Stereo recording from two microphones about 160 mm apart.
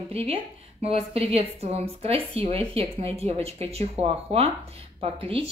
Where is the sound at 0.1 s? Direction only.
40° right (ahead or behind).